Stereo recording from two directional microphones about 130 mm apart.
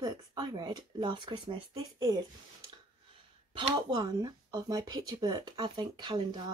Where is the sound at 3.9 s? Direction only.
30° right (ahead or behind).